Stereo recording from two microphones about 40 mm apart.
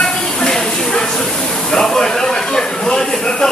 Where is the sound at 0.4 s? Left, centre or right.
Centre.